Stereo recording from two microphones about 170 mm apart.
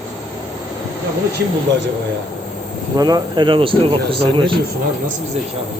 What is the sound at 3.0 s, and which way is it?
Speech, 20° right (ahead or behind).